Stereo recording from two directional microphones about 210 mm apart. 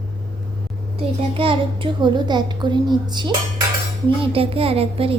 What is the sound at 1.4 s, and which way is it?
A woman's voice, 25° right (ahead or behind).